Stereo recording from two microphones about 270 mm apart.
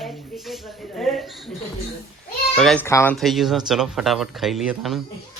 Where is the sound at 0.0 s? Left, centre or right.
Centre.